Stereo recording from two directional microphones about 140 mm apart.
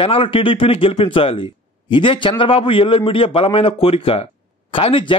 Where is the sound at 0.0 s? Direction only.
40° left (ahead or behind).